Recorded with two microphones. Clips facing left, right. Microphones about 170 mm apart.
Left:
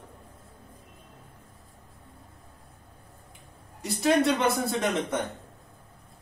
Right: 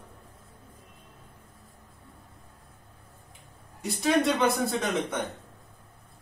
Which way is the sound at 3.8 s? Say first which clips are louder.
Left 2 dB; centre (ahead or behind).